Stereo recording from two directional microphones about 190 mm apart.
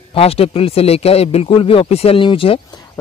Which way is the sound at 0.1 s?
30° left (ahead or behind).